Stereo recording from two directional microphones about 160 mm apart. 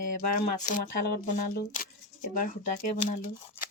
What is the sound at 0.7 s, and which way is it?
Speech, 60° left (ahead or behind).